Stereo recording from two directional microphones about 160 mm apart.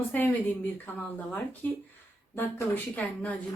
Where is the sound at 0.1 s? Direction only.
10° left (ahead or behind).